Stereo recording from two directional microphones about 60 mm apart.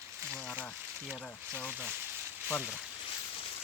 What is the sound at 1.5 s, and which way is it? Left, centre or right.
Speech, right.